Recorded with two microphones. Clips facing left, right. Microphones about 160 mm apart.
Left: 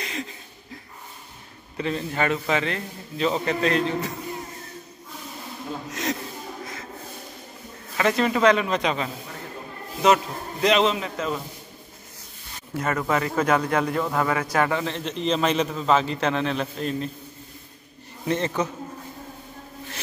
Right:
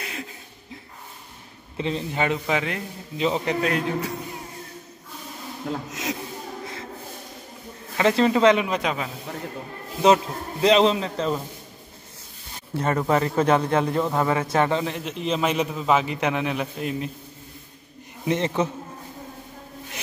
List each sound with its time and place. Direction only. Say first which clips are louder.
0.0 s a sound: left 2 dB; 5° right (ahead or behind)
1.8 s a man's voice: even; 20° right (ahead or behind)
5.9 s a sound: left 2 dB; 5° right (ahead or behind)
8.0 s a man's voice: right 2 dB; 25° right (ahead or behind)
8.6 s a man's voice: left 1 dB; 5° right (ahead or behind)
10.0 s a man's voice: right 2 dB; 30° right (ahead or behind)
12.7 s a man's voice: right 2 dB; 30° right (ahead or behind)
15.0 s a man's voice: left 1 dB; 5° right (ahead or behind)
18.2 s a man's voice: right 1 dB; 20° right (ahead or behind)